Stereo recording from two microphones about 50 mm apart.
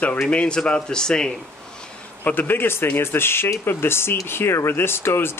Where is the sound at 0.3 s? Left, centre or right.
Left.